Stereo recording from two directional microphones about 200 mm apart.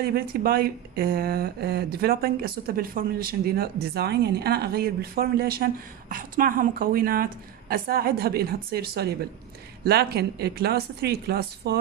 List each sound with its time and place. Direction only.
0.0 s speech: 50° right (ahead or behind)